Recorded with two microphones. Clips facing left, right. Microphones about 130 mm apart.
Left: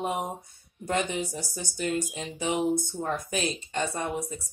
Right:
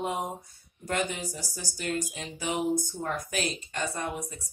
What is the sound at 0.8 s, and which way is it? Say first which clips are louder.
Speech: left 2 dB; 25° left (ahead or behind).